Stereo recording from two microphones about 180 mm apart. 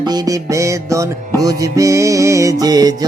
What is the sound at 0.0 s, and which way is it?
Music, 20° right (ahead or behind).